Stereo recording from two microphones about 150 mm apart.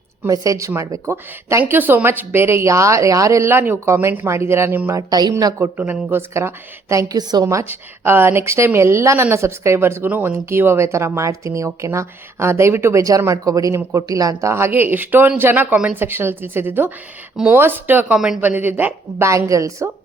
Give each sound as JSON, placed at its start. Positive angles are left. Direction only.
{"t": 0.2, "sound": "a woman's voice", "side_deg": -20}